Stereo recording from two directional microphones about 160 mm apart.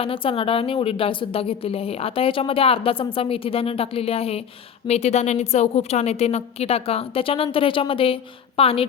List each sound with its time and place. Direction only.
0.0 s a woman's voice: 35° left (ahead or behind)